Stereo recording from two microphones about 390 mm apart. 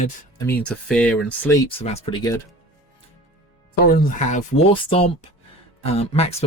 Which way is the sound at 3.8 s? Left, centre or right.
Left.